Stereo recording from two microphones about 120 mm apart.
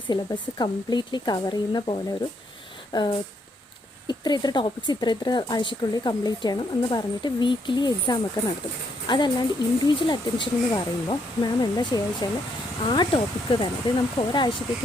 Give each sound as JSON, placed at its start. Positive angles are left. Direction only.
{"t": 0.1, "sound": "speech", "side_deg": 35}